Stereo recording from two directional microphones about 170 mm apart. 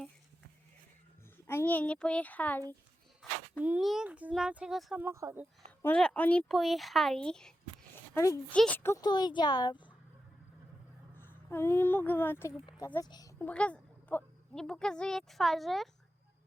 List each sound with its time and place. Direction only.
1.5 s a child's voice: 10° left (ahead or behind)
3.6 s speech: 5° right (ahead or behind)
5.8 s speech: 5° left (ahead or behind)
8.1 s a woman's voice: 20° left (ahead or behind)
11.2 s speech: 15° left (ahead or behind)
13.4 s a woman's voice: 5° left (ahead or behind)